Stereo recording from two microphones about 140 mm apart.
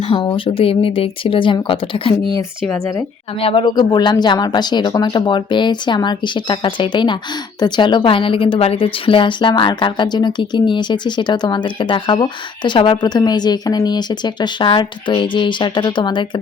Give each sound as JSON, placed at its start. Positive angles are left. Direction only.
{"t": 0.1, "sound": "a woman's voice", "side_deg": 40}
{"t": 3.4, "sound": "a woman's voice", "side_deg": 40}